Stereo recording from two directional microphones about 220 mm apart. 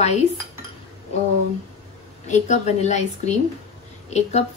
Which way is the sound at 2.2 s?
30° left (ahead or behind).